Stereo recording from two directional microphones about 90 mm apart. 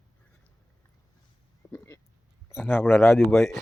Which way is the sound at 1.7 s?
25° left (ahead or behind).